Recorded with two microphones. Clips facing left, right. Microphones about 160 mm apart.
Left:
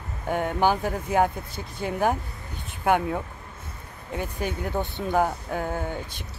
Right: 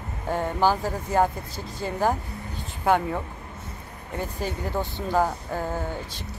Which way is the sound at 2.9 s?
5° left (ahead or behind).